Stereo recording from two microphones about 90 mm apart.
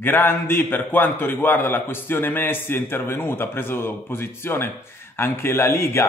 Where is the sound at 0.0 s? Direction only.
25° left (ahead or behind).